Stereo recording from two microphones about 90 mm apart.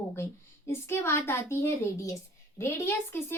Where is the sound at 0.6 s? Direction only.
30° left (ahead or behind).